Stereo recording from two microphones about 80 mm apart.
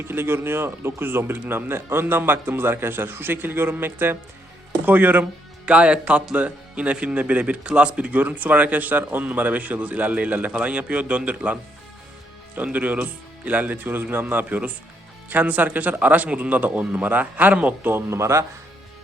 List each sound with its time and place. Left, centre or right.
0.0 s speech: right
12.5 s speech: right
18.1 s speech: right